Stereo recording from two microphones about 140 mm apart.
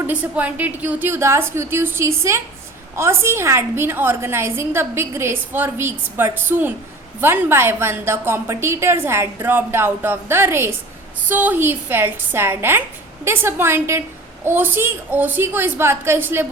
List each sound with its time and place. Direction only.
0.1 s a woman's voice: 10° right (ahead or behind)